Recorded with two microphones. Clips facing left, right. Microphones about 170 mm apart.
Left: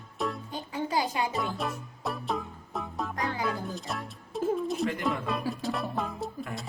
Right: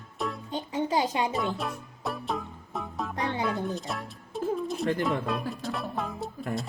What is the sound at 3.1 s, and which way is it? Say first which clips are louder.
Music: right 3 dB; 25° right (ahead or behind).